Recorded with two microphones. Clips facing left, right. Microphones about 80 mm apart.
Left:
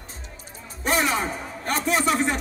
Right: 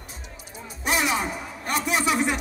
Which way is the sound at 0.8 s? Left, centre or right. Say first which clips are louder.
Left 1 dB; left.